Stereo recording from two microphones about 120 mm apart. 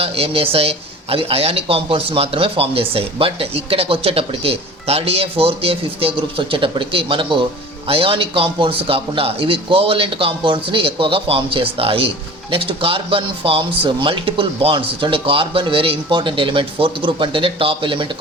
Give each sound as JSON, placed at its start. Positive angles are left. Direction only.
{"t": 0.0, "sound": "speech", "side_deg": -50}